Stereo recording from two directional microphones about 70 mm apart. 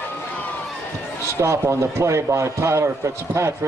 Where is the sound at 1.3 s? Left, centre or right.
Right.